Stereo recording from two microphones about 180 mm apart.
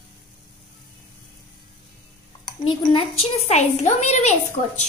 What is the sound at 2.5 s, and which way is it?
A woman's voice, 30° left (ahead or behind).